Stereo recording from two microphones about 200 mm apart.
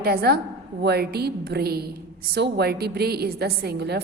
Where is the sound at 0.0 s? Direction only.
50° right (ahead or behind).